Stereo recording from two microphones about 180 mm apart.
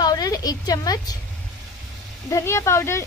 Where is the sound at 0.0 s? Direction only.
20° left (ahead or behind).